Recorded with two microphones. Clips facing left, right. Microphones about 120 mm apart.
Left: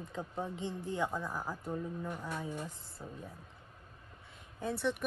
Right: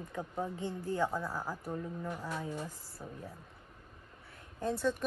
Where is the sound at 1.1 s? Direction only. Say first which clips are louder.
Right 1 dB; 10° right (ahead or behind).